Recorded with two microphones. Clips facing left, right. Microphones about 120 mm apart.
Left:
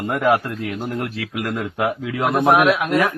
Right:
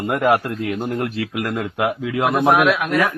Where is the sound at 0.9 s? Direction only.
30° right (ahead or behind).